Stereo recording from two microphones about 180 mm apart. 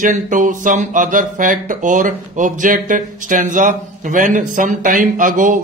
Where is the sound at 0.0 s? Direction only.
45° right (ahead or behind).